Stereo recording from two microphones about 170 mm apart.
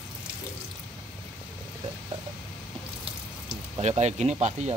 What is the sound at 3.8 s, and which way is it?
Speech, 40° right (ahead or behind).